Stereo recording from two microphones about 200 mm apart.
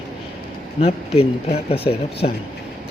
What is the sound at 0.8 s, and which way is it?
Speech, 30° left (ahead or behind).